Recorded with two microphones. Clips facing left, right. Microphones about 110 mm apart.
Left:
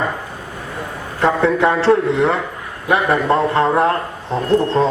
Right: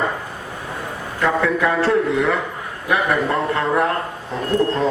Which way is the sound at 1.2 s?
30° left (ahead or behind).